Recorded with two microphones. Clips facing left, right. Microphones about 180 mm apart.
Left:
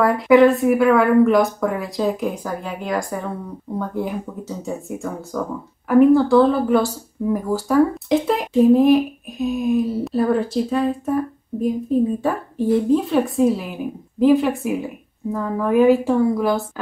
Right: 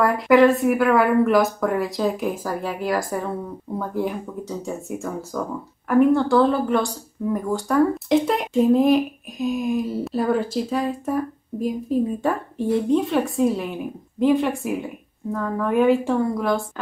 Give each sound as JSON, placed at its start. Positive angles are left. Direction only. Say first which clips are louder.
{"t": 0.0, "sound": "speech", "louder": "left 2 dB", "side_deg": 0}
{"t": 12.2, "sound": "speech", "louder": "left 2 dB", "side_deg": 0}